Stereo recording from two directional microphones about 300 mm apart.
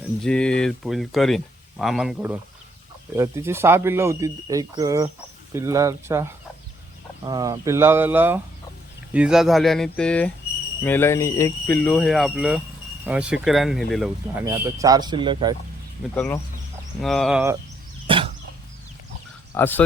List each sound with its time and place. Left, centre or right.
0.2 s speech: centre
14.4 s speech: centre
16.1 s speech: centre
18.1 s a sound: centre
19.5 s speech: centre